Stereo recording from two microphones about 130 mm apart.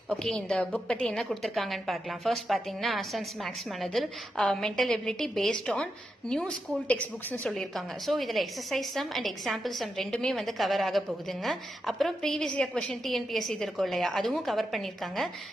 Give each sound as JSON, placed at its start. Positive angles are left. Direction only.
{"t": 0.2, "sound": "a woman's voice", "side_deg": 5}